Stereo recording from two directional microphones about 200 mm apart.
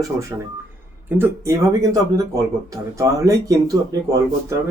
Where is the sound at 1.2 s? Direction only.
15° right (ahead or behind).